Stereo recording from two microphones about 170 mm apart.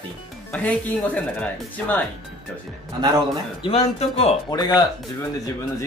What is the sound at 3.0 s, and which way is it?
Speech, 20° right (ahead or behind).